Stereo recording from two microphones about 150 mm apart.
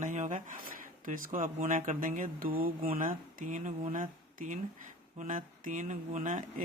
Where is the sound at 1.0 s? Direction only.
60° right (ahead or behind).